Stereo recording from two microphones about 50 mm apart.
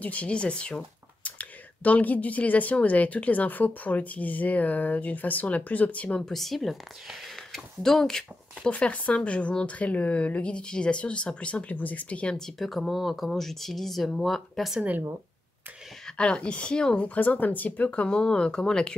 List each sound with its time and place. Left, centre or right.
0.0 s speech: left
6.0 s speech: centre
6.3 s speech: centre
8.6 s speech: left
11.7 s speech: left
12.4 s speech: centre
16.2 s speech: left
17.0 s speech: left